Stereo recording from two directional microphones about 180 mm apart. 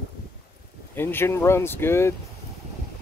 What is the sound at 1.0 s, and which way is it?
Speech, 10° left (ahead or behind).